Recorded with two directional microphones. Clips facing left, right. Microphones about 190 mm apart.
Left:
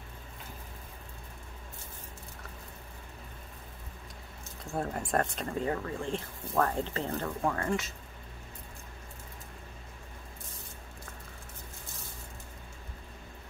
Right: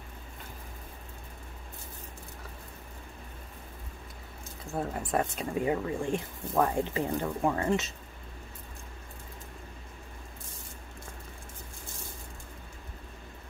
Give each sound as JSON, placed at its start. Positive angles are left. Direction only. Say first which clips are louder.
{"t": 4.6, "sound": "speech", "louder": "even", "side_deg": 0}